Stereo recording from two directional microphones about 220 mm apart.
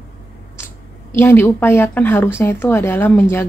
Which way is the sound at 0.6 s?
10° left (ahead or behind).